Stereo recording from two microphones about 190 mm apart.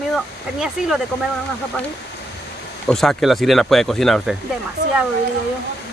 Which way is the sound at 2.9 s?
Centre (ahead or behind).